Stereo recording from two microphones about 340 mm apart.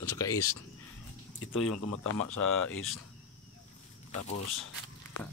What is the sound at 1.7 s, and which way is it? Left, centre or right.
Speech, left.